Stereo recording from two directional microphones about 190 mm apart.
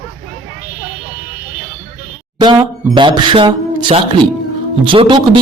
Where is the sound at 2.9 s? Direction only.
25° right (ahead or behind).